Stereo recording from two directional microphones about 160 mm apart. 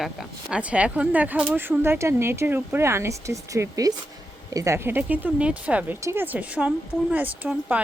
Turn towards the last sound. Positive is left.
turn(degrees=-10)  # may be behind; listen again after turning